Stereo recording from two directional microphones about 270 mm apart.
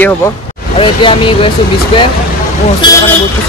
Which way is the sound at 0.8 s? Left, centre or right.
Centre.